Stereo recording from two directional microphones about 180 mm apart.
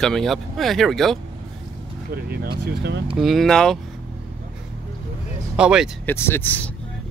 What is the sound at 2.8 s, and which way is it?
Speech, 70° right (ahead or behind).